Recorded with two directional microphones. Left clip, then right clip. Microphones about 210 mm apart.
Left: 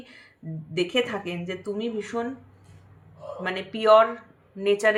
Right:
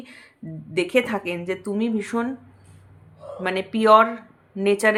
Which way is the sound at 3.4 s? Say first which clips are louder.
Right 3 dB; 45° right (ahead or behind).